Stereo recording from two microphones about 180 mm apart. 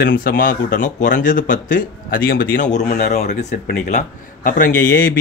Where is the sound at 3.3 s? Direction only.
40° left (ahead or behind).